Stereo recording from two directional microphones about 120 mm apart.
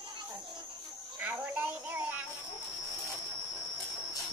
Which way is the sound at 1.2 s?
15° right (ahead or behind).